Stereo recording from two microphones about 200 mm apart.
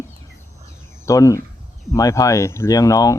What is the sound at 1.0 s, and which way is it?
Speech, 15° left (ahead or behind).